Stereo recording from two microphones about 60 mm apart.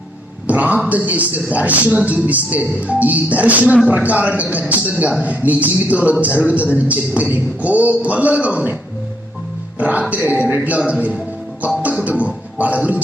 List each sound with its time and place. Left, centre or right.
0.4 s speech: right
9.7 s speech: right
12.0 s a man's voice: right